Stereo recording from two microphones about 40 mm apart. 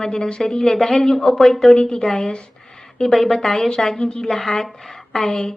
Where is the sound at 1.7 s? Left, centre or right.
Centre.